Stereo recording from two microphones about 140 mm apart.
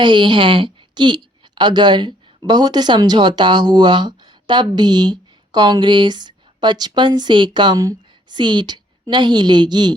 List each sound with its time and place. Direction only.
0.0 s a woman's voice: 35° right (ahead or behind)